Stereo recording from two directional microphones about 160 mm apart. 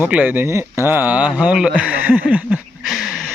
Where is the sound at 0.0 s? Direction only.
10° right (ahead or behind).